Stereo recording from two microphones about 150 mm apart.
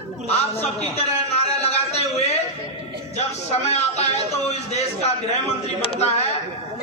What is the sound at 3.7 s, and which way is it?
Speech, 45° left (ahead or behind).